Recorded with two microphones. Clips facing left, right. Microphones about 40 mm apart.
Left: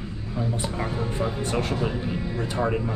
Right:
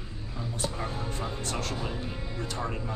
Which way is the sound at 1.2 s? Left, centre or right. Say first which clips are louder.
Left 9 dB; left.